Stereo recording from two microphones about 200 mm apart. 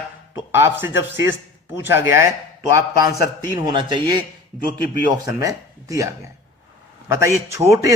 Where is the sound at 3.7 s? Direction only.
25° right (ahead or behind).